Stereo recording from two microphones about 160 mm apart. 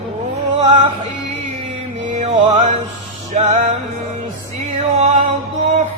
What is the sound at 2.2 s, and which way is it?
Music, 35° right (ahead or behind).